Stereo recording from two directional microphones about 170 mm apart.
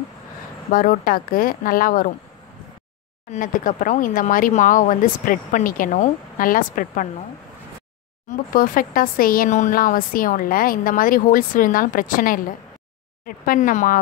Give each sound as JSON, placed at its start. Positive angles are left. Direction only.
{"t": 0.7, "sound": "speech", "side_deg": 55}
{"t": 3.3, "sound": "speech", "side_deg": 50}
{"t": 8.3, "sound": "speech", "side_deg": 55}